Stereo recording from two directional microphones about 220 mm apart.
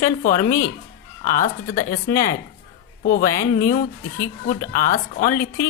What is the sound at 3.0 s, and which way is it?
A woman's voice, 40° left (ahead or behind).